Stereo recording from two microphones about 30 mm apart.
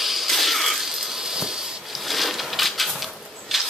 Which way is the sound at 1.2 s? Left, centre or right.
Centre.